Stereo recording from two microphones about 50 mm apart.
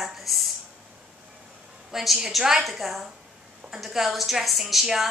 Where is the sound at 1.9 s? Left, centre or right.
Centre.